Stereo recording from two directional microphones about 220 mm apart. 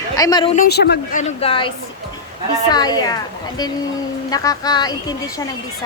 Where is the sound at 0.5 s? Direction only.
45° left (ahead or behind).